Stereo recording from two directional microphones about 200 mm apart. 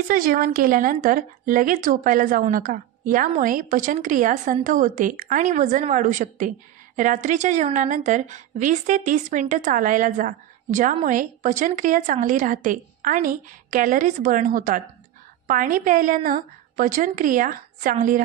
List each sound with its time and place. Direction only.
0.1 s a woman's voice: 45° right (ahead or behind)